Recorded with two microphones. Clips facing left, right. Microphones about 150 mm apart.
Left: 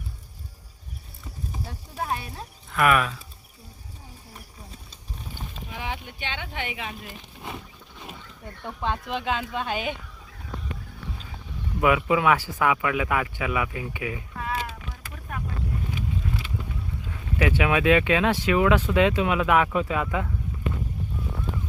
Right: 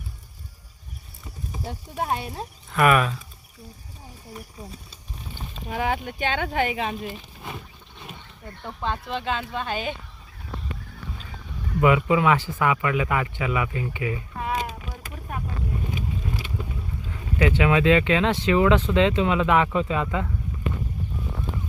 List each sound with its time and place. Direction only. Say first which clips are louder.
1.6 s speech: right 4 dB; 25° right (ahead or behind)
2.7 s speech: right 2 dB; centre (ahead or behind)
5.6 s speech: right 9 dB; 50° right (ahead or behind)
8.6 s speech: even; 15° left (ahead or behind)
11.8 s speech: right 2 dB; 10° left (ahead or behind)
14.3 s a sound: right 3 dB; 20° right (ahead or behind)
15.9 s vehicle: even; 20° right (ahead or behind)
17.1 s speech: right 2 dB; 5° left (ahead or behind)